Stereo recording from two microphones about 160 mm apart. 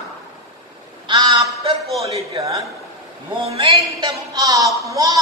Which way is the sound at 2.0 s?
40° right (ahead or behind).